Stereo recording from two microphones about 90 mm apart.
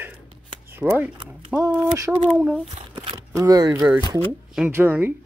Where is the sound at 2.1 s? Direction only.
15° right (ahead or behind).